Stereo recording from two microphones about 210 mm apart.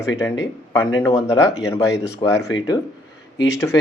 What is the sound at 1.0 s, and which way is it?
Speech, 15° left (ahead or behind).